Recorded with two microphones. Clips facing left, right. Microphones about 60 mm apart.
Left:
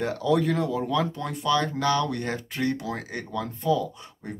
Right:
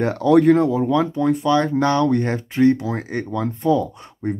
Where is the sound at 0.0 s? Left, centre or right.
Right.